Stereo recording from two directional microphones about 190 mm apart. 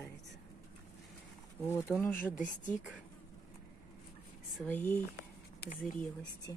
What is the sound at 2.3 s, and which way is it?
Speech, 45° left (ahead or behind).